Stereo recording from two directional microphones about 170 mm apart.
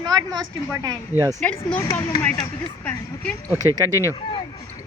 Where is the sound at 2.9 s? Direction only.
10° left (ahead or behind).